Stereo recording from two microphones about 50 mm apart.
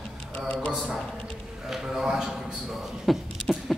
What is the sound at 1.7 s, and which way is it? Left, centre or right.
Speech, centre.